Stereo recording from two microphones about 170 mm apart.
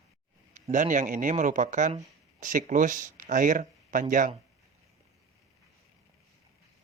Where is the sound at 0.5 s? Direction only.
50° right (ahead or behind).